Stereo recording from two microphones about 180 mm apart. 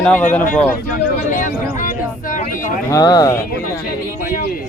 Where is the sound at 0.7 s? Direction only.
50° left (ahead or behind).